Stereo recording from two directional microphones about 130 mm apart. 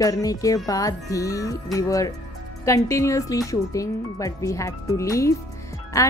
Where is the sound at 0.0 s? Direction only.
25° left (ahead or behind).